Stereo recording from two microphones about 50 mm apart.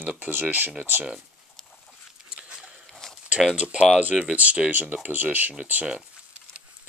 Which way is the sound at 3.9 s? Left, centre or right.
Right.